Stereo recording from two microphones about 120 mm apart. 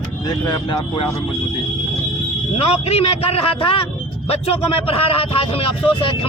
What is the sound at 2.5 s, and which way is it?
A man's voice, 55° left (ahead or behind).